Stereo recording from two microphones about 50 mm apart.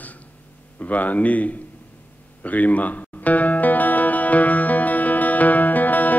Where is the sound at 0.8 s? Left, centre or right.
Left.